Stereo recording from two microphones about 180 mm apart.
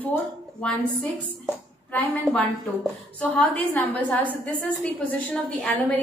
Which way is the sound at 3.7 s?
10° left (ahead or behind).